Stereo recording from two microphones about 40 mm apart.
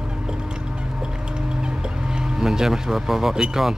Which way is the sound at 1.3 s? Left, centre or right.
Right.